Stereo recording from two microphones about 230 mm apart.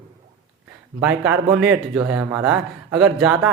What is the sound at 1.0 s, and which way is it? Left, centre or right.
A man's voice, centre.